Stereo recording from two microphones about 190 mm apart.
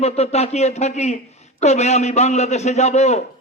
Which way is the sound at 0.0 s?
35° left (ahead or behind).